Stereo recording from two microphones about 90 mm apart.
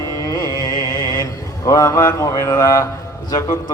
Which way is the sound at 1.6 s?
35° left (ahead or behind).